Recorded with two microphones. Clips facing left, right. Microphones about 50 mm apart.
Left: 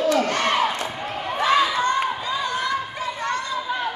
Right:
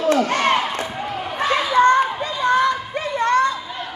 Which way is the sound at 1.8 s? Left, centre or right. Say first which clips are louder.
Right 7 dB; right.